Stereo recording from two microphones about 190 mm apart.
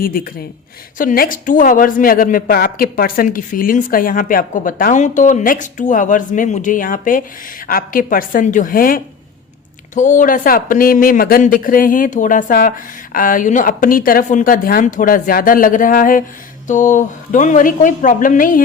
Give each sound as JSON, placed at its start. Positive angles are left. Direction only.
{"t": 0.9, "sound": "a woman's voice", "side_deg": 50}